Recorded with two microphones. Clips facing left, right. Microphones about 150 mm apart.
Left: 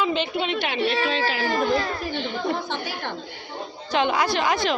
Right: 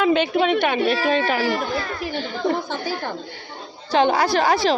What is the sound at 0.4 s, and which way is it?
A child's voice, 55° right (ahead or behind).